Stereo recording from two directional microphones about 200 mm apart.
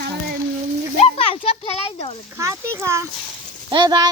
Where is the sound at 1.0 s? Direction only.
30° left (ahead or behind).